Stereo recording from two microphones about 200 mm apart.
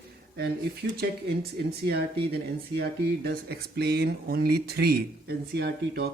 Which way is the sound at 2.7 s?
50° right (ahead or behind).